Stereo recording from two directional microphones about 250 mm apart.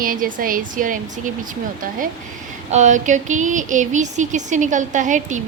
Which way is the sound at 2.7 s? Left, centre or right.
Right.